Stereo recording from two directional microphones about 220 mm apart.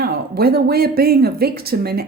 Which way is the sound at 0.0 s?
45° right (ahead or behind).